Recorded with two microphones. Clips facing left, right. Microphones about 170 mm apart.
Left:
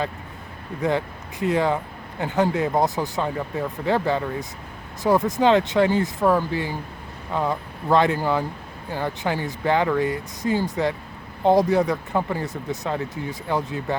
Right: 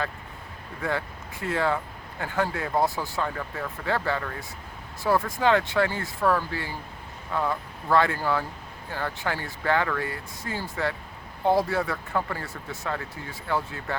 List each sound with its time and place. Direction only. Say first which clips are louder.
0.8 s speech: left 6 dB; 20° left (ahead or behind)